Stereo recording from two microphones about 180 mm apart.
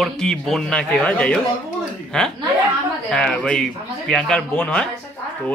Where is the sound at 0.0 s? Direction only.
Centre (ahead or behind).